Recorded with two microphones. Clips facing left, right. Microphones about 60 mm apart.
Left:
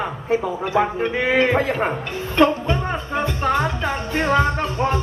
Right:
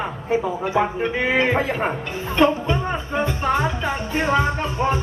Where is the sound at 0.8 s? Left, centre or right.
Centre.